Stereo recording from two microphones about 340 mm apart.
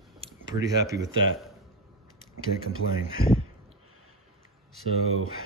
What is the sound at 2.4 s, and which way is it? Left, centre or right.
Speech, right.